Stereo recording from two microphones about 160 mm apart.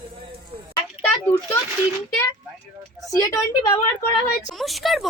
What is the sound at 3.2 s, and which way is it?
Speech, 20° left (ahead or behind).